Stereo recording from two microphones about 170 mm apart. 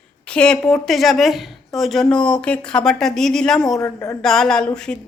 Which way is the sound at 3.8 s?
20° left (ahead or behind).